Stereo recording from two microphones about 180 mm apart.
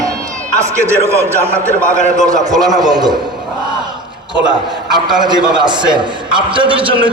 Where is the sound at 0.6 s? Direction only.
15° right (ahead or behind).